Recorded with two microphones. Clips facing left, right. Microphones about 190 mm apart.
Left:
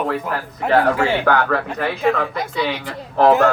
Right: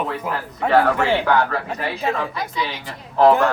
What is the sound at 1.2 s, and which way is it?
A man's voice, 55° left (ahead or behind).